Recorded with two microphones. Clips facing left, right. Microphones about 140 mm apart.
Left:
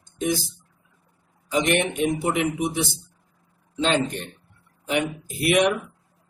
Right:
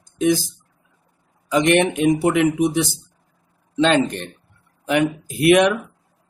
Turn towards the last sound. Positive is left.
turn(degrees=-90)